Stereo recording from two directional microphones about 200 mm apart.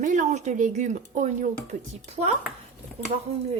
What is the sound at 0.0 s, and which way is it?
Speech, 40° right (ahead or behind).